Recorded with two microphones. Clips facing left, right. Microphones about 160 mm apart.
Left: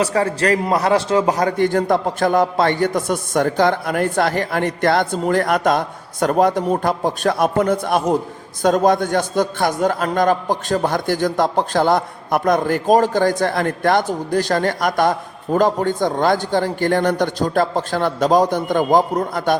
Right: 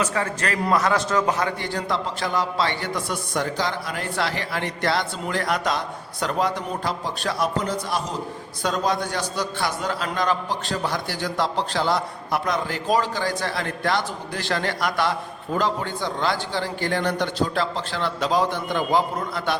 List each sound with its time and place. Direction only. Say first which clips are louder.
0.0 s a man's voice: left 7 dB; 35° left (ahead or behind)